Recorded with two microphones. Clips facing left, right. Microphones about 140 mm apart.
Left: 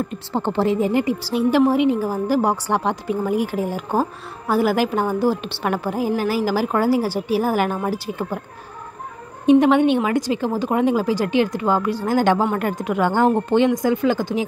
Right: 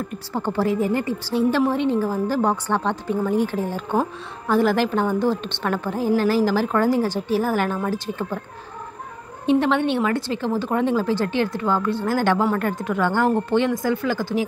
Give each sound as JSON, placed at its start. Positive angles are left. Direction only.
{"t": 0.1, "sound": "a woman's voice", "side_deg": 25}
{"t": 9.5, "sound": "a woman's voice", "side_deg": 15}